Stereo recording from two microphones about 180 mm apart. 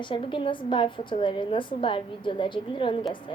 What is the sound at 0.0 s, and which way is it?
A woman's voice, 25° left (ahead or behind).